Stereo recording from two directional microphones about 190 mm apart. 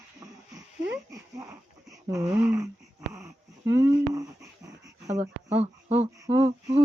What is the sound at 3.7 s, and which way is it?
Speech, 15° right (ahead or behind).